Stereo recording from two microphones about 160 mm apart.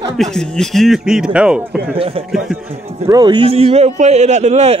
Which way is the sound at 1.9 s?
35° right (ahead or behind).